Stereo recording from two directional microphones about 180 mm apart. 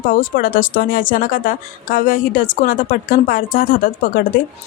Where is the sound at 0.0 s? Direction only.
50° left (ahead or behind).